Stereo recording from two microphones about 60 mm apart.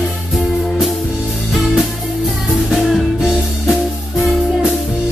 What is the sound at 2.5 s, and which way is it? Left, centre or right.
Music, centre.